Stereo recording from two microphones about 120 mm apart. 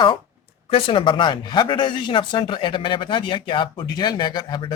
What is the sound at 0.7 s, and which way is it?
Speech, 50° left (ahead or behind).